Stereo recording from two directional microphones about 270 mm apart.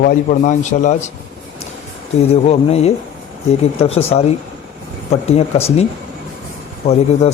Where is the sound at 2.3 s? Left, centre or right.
Left.